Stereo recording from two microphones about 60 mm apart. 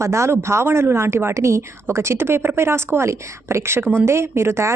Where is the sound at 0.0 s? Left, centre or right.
Right.